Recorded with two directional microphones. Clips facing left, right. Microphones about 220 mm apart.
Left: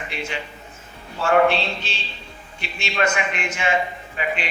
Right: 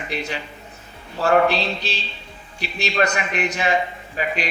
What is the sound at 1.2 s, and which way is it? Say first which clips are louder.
A man's voice: even; 35° right (ahead or behind).